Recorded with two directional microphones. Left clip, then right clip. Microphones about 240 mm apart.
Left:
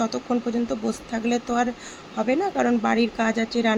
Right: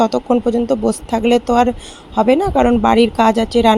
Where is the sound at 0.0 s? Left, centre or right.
Right.